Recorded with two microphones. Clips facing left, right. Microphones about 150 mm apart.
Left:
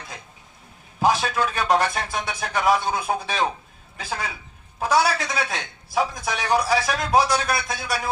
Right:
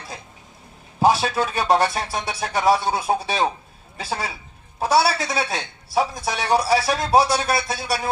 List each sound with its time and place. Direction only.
0.9 s a man's voice: 35° right (ahead or behind)